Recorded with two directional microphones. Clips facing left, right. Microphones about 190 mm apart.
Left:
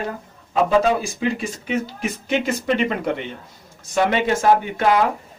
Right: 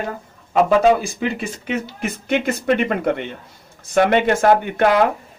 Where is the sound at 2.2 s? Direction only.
55° right (ahead or behind).